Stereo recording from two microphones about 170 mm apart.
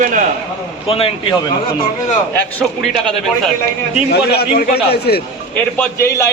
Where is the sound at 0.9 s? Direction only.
35° left (ahead or behind).